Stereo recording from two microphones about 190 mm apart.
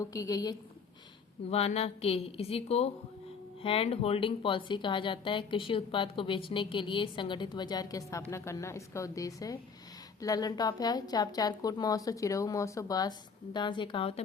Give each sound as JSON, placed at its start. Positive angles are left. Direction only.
{"t": 0.0, "sound": "speech", "side_deg": 15}
{"t": 1.5, "sound": "a woman's voice", "side_deg": 35}